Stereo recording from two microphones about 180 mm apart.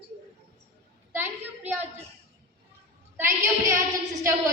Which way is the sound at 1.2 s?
10° right (ahead or behind).